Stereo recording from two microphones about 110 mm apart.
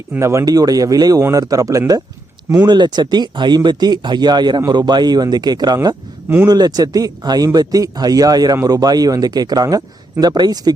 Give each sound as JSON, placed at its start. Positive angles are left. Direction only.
{"t": 0.2, "sound": "speech", "side_deg": -25}
{"t": 2.6, "sound": "speech", "side_deg": -40}
{"t": 6.2, "sound": "speech", "side_deg": -20}
{"t": 6.5, "sound": "speech", "side_deg": -35}